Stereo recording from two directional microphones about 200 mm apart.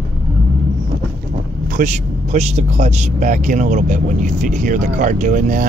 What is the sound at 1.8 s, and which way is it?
Speech, 35° right (ahead or behind).